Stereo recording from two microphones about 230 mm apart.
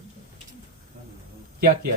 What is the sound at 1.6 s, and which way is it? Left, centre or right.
Speech, right.